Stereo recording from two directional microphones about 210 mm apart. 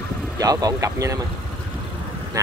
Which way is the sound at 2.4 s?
15° right (ahead or behind).